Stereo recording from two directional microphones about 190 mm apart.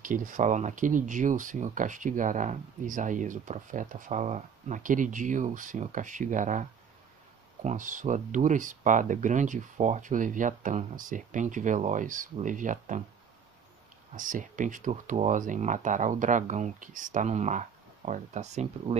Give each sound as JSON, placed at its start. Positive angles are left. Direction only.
{"t": 0.0, "sound": "speech", "side_deg": -45}
{"t": 7.6, "sound": "speech", "side_deg": -45}
{"t": 14.1, "sound": "speech", "side_deg": -45}